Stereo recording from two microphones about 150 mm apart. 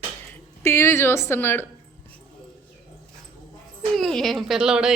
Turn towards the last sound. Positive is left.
turn(degrees=-5)  # may be behind; listen again after turning